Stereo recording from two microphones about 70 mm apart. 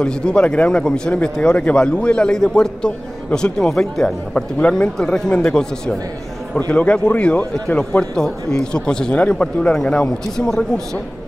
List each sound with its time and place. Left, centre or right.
0.0 s a man's voice: centre